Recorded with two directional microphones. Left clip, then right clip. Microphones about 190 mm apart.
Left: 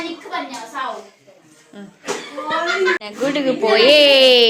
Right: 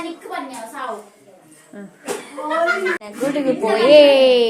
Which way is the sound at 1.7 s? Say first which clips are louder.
Right 1 dB; 25° right (ahead or behind).